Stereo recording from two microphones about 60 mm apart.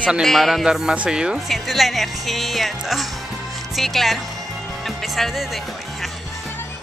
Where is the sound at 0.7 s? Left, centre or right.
Centre.